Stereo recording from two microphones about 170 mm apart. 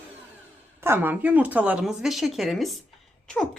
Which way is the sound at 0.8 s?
15° right (ahead or behind).